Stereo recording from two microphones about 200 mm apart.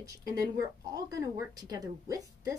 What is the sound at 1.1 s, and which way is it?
Speech, 20° right (ahead or behind).